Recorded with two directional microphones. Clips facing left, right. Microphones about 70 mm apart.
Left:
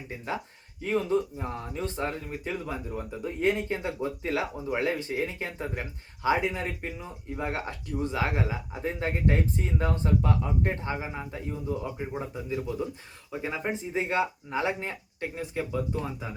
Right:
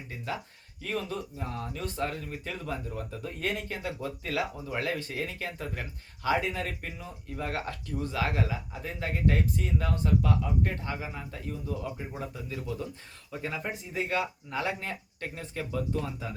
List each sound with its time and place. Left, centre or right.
0.8 s speech: left